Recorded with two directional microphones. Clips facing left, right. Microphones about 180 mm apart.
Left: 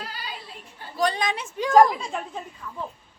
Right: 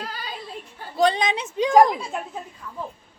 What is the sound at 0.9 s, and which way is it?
A woman's voice, 25° right (ahead or behind).